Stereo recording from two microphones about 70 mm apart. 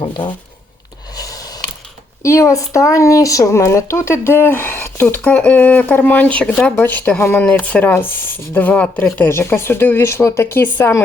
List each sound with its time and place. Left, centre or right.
1.1 s a sound: left
2.2 s speech: left
5.2 s speech: centre
6.8 s speech: left
9.0 s speech: left